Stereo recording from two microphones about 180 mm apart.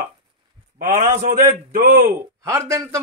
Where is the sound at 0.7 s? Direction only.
50° right (ahead or behind).